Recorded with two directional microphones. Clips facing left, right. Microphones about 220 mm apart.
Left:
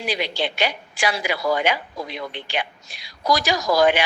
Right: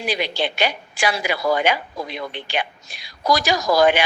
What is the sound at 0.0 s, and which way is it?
A woman's voice, 50° right (ahead or behind).